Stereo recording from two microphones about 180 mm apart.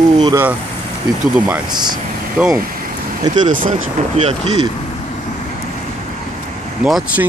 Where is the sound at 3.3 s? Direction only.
45° right (ahead or behind).